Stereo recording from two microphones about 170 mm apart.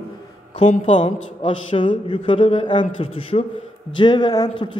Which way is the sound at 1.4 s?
30° left (ahead or behind).